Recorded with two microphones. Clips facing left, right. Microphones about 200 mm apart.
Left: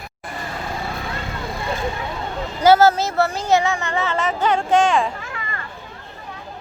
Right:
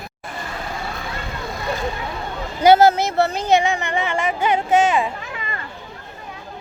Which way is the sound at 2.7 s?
15° right (ahead or behind).